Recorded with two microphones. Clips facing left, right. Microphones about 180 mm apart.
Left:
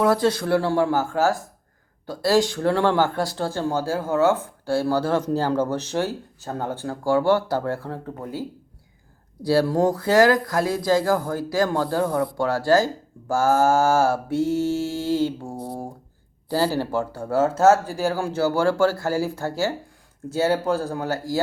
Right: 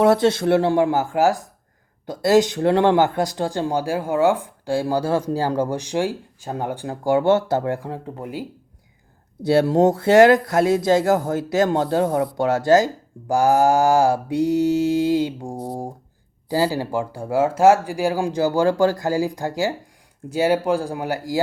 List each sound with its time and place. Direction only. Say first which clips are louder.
0.0 s speech: right 4 dB; 25° right (ahead or behind)